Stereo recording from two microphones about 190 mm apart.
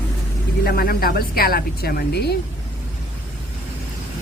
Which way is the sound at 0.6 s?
50° left (ahead or behind).